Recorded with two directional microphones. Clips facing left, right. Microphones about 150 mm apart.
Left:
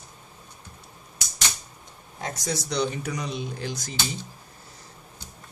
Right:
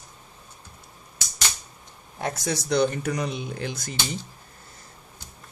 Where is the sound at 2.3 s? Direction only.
55° right (ahead or behind).